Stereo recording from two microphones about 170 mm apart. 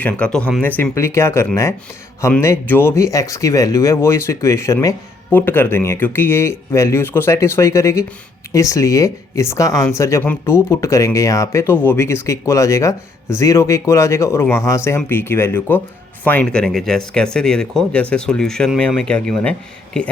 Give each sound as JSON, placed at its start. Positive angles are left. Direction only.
{"t": 0.0, "sound": "speech", "side_deg": 5}